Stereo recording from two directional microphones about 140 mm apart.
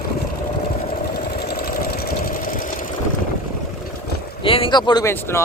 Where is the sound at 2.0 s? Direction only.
90° left.